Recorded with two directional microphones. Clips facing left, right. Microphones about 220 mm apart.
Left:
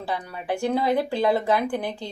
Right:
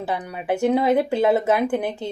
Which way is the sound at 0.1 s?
20° right (ahead or behind).